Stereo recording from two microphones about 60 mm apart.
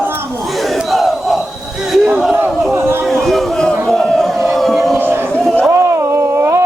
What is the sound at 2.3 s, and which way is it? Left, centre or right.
Chatter, right.